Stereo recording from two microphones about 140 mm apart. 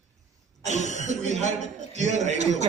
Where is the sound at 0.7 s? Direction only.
60° left (ahead or behind).